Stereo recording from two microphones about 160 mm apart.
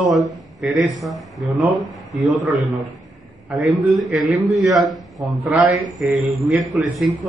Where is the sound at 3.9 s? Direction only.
Centre (ahead or behind).